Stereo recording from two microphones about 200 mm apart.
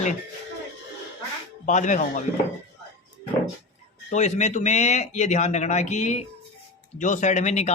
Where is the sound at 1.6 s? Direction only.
40° left (ahead or behind).